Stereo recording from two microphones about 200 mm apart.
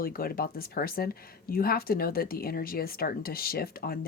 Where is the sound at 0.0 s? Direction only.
45° left (ahead or behind).